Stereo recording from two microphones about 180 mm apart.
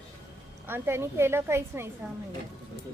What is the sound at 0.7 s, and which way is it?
A woman's voice, 15° right (ahead or behind).